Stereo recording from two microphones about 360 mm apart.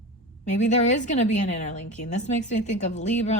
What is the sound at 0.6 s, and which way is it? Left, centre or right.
Speech, centre.